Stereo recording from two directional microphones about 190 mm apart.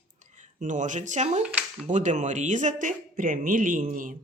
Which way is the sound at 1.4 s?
5° right (ahead or behind).